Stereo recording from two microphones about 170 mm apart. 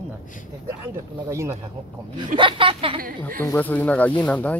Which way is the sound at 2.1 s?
30° right (ahead or behind).